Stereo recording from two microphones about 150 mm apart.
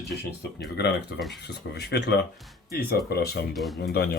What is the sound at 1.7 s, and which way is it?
Speech, 90° left.